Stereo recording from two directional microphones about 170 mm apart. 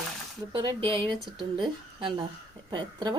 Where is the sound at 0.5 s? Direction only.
30° right (ahead or behind).